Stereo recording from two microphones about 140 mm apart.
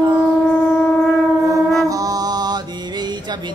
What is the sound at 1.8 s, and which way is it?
Music, 25° right (ahead or behind).